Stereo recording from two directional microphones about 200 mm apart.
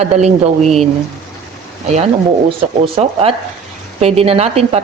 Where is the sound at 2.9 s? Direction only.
30° right (ahead or behind).